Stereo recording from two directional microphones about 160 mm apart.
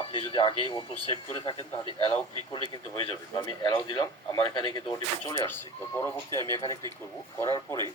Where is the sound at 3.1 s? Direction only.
30° left (ahead or behind).